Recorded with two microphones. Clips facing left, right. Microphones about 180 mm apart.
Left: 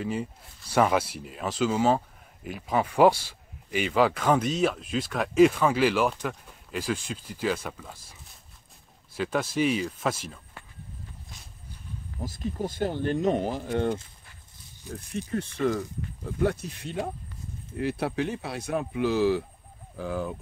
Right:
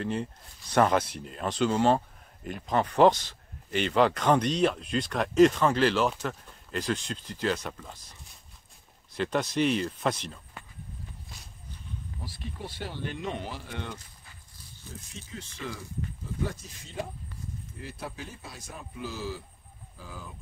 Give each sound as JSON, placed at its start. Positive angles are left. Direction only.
{"t": 0.0, "sound": "speech", "side_deg": 5}
{"t": 12.2, "sound": "speech", "side_deg": 45}
{"t": 15.1, "sound": "speech", "side_deg": 60}
{"t": 16.3, "sound": "speech", "side_deg": 65}